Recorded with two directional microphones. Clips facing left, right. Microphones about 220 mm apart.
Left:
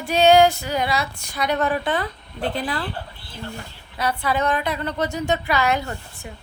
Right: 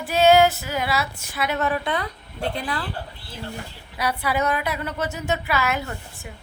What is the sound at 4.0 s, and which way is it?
A woman's voice, 10° right (ahead or behind).